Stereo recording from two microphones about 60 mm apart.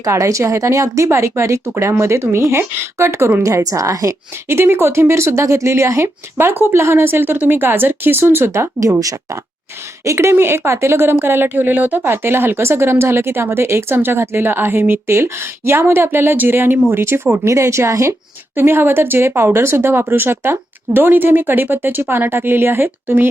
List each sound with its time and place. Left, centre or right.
0.0 s speech: right
6.3 s a woman's voice: right
8.8 s speech: right
10.0 s speech: right
10.3 s a woman's voice: right
17.4 s speech: right
18.5 s a woman's voice: right